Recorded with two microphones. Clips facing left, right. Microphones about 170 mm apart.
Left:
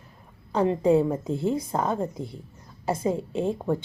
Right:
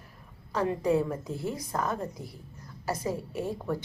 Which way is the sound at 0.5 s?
25° left (ahead or behind).